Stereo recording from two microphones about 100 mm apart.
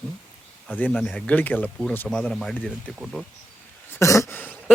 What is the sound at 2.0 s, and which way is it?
Speech, 5° left (ahead or behind).